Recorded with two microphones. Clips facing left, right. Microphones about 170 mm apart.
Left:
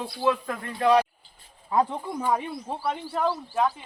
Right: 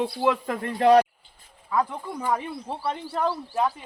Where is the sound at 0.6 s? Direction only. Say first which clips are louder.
Right 4 dB; 35° right (ahead or behind).